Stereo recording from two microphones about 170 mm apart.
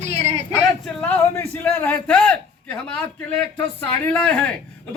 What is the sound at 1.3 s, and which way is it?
A man's voice, 15° left (ahead or behind).